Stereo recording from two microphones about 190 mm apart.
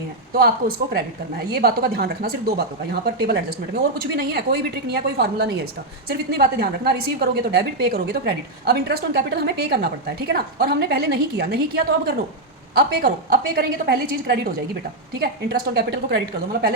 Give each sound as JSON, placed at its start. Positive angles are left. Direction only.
{"t": 1.5, "sound": "a woman's voice", "side_deg": -55}